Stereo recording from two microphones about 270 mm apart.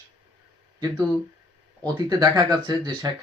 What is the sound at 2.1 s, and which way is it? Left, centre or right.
A man's voice, centre.